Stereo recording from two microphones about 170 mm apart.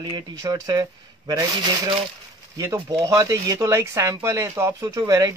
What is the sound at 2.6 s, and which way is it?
Speech, 20° right (ahead or behind).